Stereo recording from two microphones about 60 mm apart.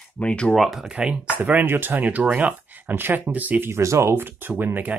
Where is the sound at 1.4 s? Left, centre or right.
Right.